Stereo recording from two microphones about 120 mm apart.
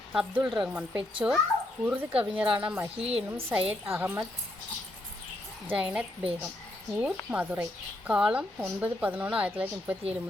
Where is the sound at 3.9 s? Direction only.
15° right (ahead or behind).